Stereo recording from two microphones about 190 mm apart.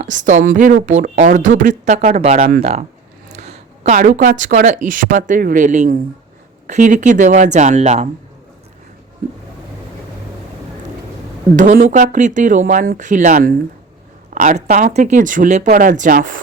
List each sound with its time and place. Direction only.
0.3 s speech: 40° right (ahead or behind)
3.3 s a sound: 35° right (ahead or behind)
3.9 s speech: 45° right (ahead or behind)
11.5 s speech: 40° right (ahead or behind)